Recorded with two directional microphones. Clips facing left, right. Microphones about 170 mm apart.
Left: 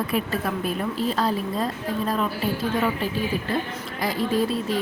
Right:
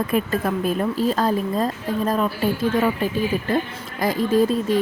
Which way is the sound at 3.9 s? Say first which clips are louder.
Right 5 dB; 45° right (ahead or behind).